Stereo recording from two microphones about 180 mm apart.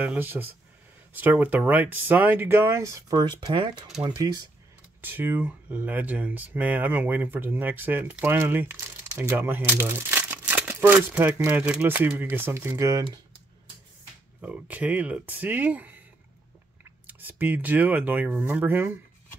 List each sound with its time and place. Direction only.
0.0 s speech: 10° right (ahead or behind)
5.0 s speech: 10° right (ahead or behind)
14.4 s speech: 10° right (ahead or behind)
17.0 s speech: 10° right (ahead or behind)